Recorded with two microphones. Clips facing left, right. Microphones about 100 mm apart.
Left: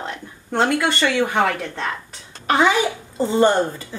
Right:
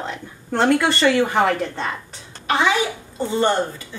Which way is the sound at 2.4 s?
40° left (ahead or behind).